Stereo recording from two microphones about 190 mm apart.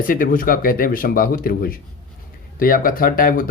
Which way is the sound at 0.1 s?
45° left (ahead or behind).